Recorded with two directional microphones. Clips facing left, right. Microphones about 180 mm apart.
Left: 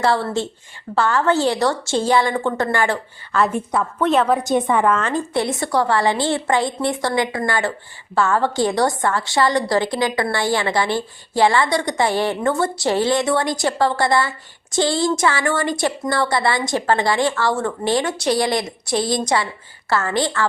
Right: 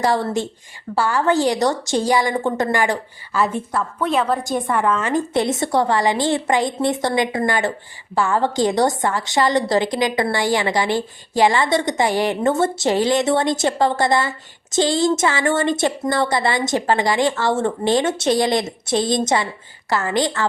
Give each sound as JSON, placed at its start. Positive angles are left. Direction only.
{"t": 0.0, "sound": "a woman's voice", "side_deg": -15}
{"t": 3.5, "sound": "a woman's voice", "side_deg": 0}
{"t": 5.0, "sound": "a woman's voice", "side_deg": -20}